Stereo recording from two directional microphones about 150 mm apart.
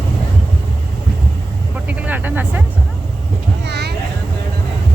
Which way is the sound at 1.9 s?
10° right (ahead or behind).